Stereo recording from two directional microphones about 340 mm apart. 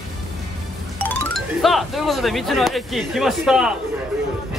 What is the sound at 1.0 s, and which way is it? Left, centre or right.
Speech, centre.